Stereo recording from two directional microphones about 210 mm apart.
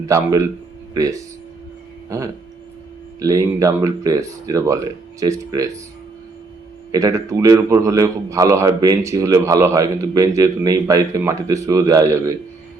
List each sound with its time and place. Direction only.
0.0 s a man's voice: 15° right (ahead or behind)
6.9 s a man's voice: 15° right (ahead or behind)